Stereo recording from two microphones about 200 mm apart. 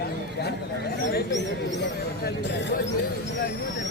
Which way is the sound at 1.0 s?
65° left (ahead or behind).